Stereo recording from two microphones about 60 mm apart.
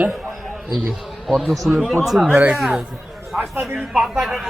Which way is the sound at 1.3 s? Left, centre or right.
Centre.